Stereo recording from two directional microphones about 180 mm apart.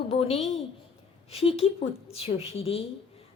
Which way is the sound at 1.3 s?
35° left (ahead or behind).